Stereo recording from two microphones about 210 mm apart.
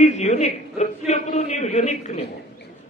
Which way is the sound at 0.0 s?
35° left (ahead or behind).